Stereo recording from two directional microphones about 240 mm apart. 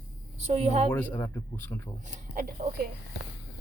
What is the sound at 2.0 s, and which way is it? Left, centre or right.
Speech, right.